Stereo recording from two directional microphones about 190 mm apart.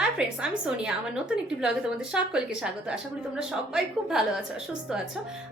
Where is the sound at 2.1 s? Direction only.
5° right (ahead or behind).